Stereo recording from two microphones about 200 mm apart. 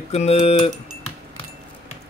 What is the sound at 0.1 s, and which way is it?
Speech, 30° left (ahead or behind).